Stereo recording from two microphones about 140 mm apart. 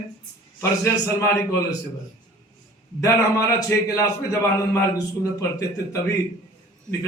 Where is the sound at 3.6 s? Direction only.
25° left (ahead or behind).